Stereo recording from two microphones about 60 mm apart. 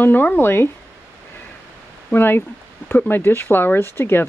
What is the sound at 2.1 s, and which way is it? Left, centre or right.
Speech, left.